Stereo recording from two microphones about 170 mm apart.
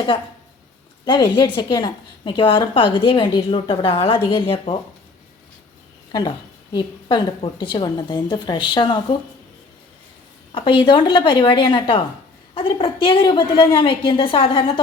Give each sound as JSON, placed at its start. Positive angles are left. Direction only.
{"t": 1.0, "sound": "a woman's voice", "side_deg": 30}
{"t": 6.1, "sound": "a woman's voice", "side_deg": 25}
{"t": 10.5, "sound": "a woman's voice", "side_deg": 30}